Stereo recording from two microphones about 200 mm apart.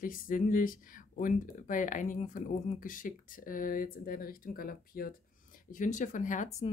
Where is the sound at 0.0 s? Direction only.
45° left (ahead or behind).